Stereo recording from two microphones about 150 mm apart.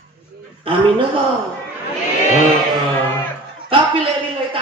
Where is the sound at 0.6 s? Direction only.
35° right (ahead or behind).